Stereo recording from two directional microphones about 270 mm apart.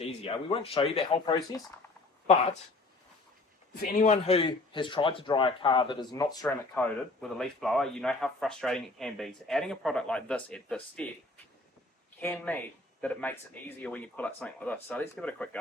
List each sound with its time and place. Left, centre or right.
0.0 s speech: left
3.8 s a man's voice: left; by 11.1 s centre
12.2 s a man's voice: centre